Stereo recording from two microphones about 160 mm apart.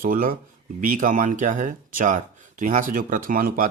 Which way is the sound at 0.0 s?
65° right (ahead or behind).